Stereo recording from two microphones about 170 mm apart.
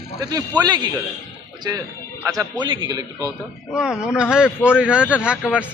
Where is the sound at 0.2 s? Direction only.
20° right (ahead or behind).